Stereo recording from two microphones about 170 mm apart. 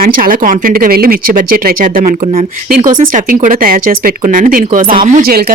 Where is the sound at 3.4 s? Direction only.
55° right (ahead or behind).